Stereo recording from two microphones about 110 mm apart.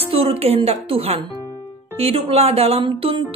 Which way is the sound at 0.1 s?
60° right (ahead or behind).